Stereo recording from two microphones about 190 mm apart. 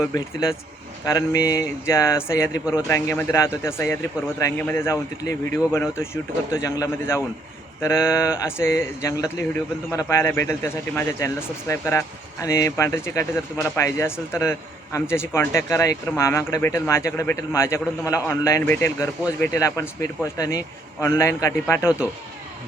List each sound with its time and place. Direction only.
0.0 s speech: 20° left (ahead or behind)